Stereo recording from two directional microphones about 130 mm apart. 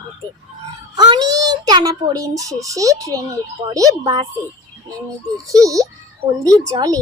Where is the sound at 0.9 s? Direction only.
30° right (ahead or behind).